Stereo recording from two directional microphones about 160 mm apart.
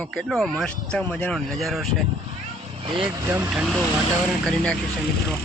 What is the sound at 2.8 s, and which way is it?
Speech, 30° right (ahead or behind).